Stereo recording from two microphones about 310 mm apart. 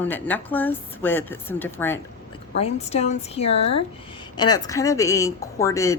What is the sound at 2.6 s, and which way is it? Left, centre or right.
A woman's voice, centre.